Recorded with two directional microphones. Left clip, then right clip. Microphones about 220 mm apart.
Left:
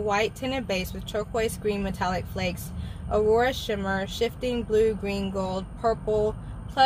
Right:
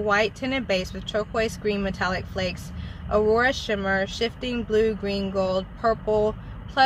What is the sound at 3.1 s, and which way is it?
Speech, 5° right (ahead or behind).